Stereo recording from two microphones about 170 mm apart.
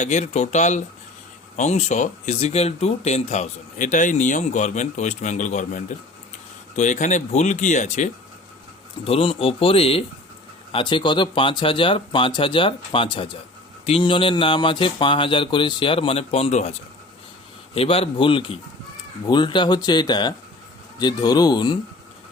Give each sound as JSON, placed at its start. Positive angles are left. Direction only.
{"t": 0.0, "sound": "speech", "side_deg": 40}
{"t": 9.0, "sound": "speech", "side_deg": 35}
{"t": 17.7, "sound": "speech", "side_deg": 35}